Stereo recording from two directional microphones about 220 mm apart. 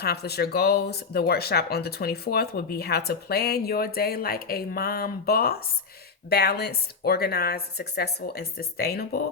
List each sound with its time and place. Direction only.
0.0 s speech: 45° left (ahead or behind)